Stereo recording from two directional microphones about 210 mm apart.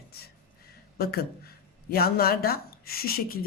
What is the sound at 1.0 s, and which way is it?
Speech, 45° left (ahead or behind).